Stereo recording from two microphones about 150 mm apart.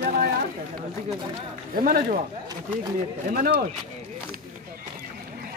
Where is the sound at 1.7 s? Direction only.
70° right (ahead or behind).